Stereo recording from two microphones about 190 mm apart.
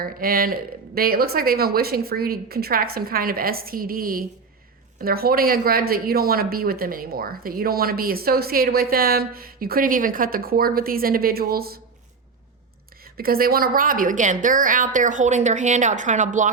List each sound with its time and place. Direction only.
0.0 s speech: 50° right (ahead or behind)
13.1 s a woman's voice: 50° right (ahead or behind)